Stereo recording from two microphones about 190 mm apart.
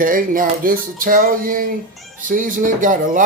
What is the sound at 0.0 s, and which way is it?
Speech, 45° right (ahead or behind).